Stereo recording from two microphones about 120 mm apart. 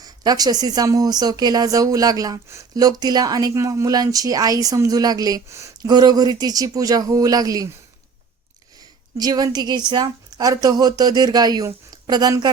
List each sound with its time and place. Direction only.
0.0 s speech: 35° right (ahead or behind)
9.1 s speech: 35° right (ahead or behind)